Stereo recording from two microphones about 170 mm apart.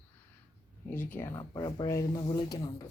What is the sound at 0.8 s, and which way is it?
Speech, 15° left (ahead or behind).